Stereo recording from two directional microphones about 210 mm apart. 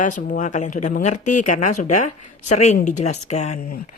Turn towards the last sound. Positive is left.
turn(degrees=35)  # may be behind; listen again after turning